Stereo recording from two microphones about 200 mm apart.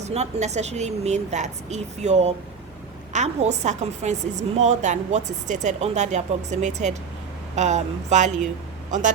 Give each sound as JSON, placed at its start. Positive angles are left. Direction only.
{"t": 0.0, "sound": "a woman's voice", "side_deg": -35}